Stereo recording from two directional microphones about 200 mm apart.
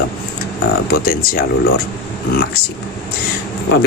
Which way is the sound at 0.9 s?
50° left (ahead or behind).